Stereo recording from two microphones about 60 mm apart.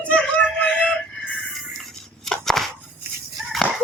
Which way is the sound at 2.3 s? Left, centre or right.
Centre.